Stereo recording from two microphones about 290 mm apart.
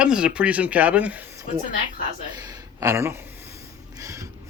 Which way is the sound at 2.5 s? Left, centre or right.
Centre.